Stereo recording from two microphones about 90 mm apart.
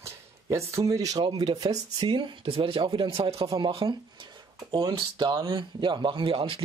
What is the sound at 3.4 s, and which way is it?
Speech, 55° right (ahead or behind).